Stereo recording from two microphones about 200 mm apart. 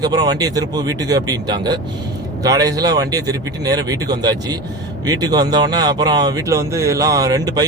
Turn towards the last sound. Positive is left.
turn(degrees=-20)  # may be behind; listen again after turning